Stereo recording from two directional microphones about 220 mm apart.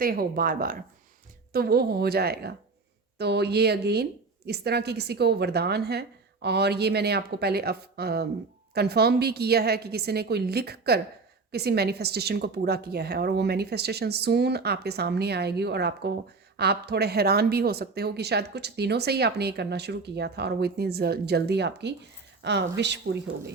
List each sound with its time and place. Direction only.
0.0 s a woman's voice: 40° right (ahead or behind)